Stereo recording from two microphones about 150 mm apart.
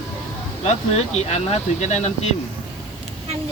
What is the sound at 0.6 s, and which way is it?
Speech, 45° left (ahead or behind).